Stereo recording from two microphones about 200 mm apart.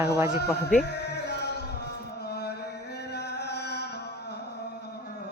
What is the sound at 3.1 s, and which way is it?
Music, 55° left (ahead or behind).